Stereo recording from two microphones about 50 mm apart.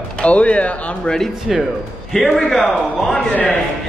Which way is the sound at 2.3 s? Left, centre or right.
Centre.